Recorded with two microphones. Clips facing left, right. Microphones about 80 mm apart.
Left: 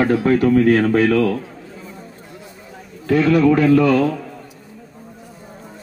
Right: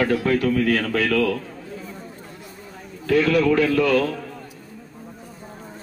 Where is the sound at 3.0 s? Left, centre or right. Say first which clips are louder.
Left 4 dB; left.